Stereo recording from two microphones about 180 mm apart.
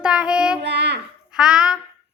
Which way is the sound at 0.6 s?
70° right (ahead or behind).